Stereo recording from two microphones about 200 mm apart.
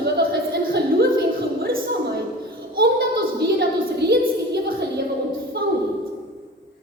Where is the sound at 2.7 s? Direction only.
50° right (ahead or behind).